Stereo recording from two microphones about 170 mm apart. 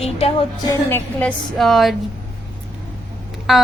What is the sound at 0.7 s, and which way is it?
Speech, 15° left (ahead or behind).